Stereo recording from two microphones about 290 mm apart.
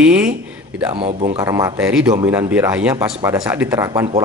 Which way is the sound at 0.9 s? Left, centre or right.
Centre.